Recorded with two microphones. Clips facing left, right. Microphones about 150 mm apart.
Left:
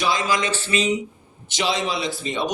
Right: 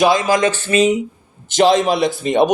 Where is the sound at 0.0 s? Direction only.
50° right (ahead or behind).